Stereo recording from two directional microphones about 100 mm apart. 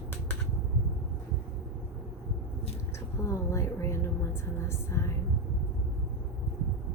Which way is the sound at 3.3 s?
30° left (ahead or behind).